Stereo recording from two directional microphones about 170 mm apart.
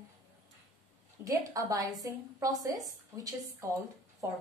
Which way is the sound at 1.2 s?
20° right (ahead or behind).